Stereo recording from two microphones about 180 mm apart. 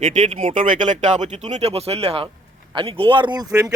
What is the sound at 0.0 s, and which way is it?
Speech, 40° right (ahead or behind).